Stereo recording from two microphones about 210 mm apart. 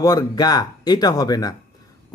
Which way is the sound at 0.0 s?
15° left (ahead or behind).